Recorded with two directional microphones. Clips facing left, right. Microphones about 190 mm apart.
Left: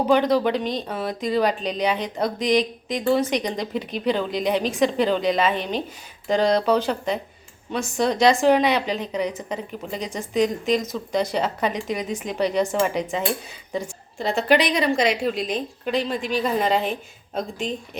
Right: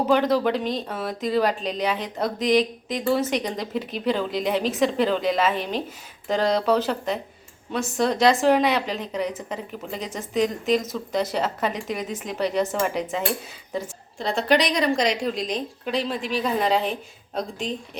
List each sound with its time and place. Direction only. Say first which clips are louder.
0.0 s speech: left 1 dB; 5° right (ahead or behind)